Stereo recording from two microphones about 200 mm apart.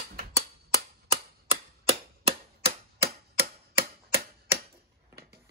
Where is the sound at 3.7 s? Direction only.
10° right (ahead or behind).